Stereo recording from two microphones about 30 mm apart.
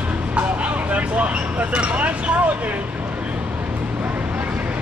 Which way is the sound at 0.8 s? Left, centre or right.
Right.